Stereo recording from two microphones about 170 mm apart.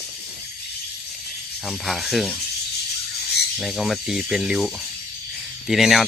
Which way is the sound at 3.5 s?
Centre (ahead or behind).